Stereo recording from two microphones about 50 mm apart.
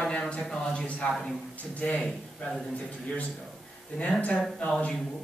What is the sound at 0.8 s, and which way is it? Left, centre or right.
Speech, left.